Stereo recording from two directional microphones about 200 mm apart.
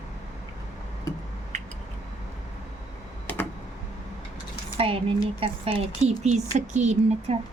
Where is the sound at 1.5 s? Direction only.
35° right (ahead or behind).